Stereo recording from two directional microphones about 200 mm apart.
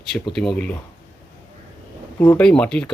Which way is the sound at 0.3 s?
Centre (ahead or behind).